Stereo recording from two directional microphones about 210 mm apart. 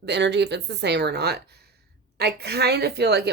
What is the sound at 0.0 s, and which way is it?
Speech, 55° right (ahead or behind).